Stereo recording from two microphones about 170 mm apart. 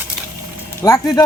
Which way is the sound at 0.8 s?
20° left (ahead or behind).